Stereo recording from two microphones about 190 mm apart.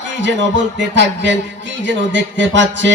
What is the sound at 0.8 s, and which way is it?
A man's voice, 70° right (ahead or behind).